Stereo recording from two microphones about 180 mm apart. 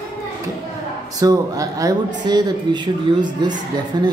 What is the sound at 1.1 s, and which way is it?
Speech, 20° right (ahead or behind).